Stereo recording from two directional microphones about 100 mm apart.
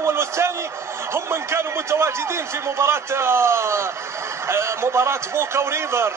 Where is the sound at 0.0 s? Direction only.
25° right (ahead or behind).